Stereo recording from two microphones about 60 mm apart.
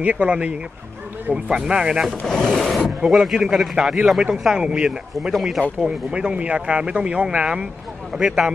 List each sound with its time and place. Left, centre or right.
0.0 s speech: right
2.2 s a man's voice: centre
5.8 s speech: centre